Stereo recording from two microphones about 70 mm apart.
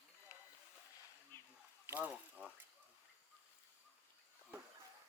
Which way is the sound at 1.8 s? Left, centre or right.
Right.